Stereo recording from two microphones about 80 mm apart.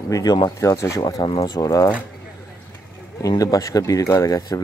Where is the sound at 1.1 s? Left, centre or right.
Left.